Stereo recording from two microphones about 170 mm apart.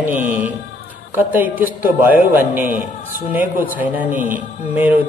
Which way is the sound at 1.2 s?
10° right (ahead or behind).